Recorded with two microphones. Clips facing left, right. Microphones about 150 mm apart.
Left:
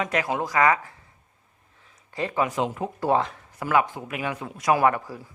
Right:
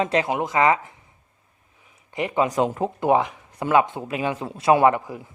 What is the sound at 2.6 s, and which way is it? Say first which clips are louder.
Speech: right 5 dB; 45° right (ahead or behind).